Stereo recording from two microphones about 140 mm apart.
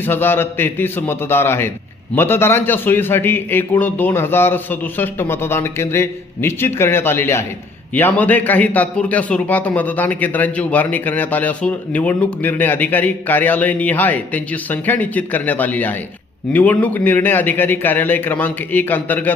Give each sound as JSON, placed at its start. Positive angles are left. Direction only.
{"t": 0.0, "sound": "a man's voice", "side_deg": 15}